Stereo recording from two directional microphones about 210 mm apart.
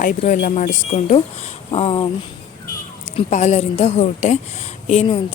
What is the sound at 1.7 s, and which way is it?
Speech, 25° left (ahead or behind).